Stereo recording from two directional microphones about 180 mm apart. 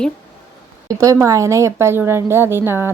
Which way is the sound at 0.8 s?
20° right (ahead or behind).